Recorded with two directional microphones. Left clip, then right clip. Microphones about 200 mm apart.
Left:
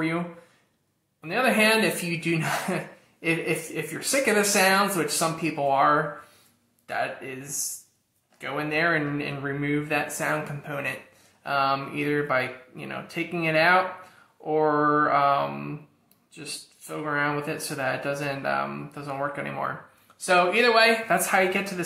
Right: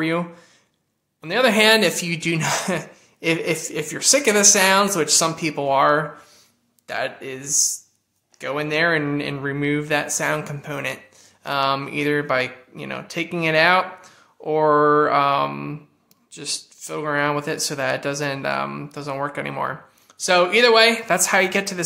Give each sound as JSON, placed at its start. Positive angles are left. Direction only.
{"t": 1.2, "sound": "speech", "side_deg": -45}